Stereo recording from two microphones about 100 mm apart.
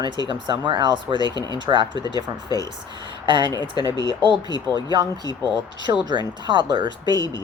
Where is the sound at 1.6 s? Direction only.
50° right (ahead or behind).